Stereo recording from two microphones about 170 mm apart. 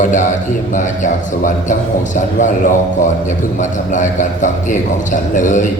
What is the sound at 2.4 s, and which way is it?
A man's voice, 45° left (ahead or behind).